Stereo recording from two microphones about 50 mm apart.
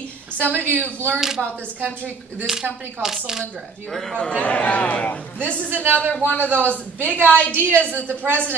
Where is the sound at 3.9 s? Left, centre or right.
Centre.